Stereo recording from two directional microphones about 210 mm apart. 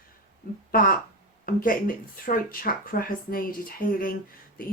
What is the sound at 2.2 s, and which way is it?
Speech, 40° left (ahead or behind).